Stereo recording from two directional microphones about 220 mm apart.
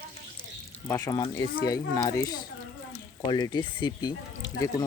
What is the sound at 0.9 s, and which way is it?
Speech, 15° left (ahead or behind).